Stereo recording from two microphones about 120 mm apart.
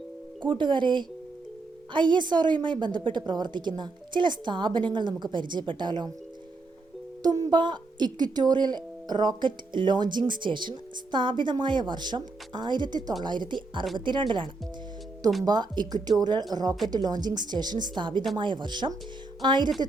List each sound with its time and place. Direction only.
0.4 s speech: 40° right (ahead or behind)
7.2 s speech: 30° right (ahead or behind)